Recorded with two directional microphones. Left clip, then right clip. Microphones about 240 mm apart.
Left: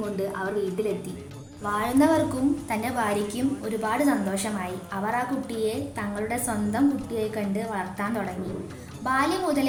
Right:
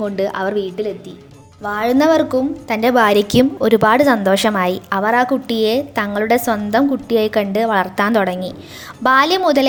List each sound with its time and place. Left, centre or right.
0.2 s a woman's voice: right
1.6 s a woman's voice: right